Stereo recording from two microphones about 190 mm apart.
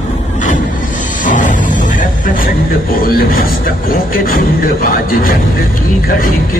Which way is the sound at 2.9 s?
50° left (ahead or behind).